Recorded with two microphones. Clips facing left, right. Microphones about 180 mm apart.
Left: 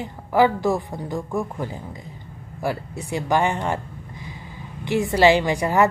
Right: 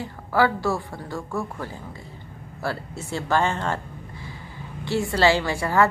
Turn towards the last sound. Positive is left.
turn(degrees=15)  # may be behind; listen again after turning